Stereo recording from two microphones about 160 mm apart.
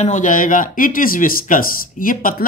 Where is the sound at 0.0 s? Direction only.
50° left (ahead or behind).